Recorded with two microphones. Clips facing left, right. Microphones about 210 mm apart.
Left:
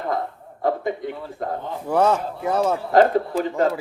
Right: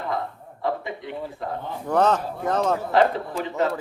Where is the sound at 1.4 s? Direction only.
45° left (ahead or behind).